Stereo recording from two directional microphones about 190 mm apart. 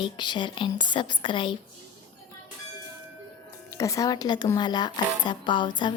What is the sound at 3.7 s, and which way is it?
A woman's voice, 15° left (ahead or behind).